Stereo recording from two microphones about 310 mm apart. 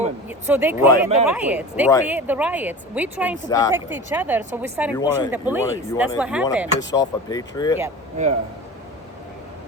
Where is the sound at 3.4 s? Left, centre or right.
Centre.